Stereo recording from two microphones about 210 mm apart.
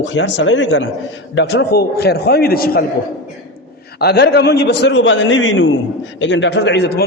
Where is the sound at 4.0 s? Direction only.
50° left (ahead or behind).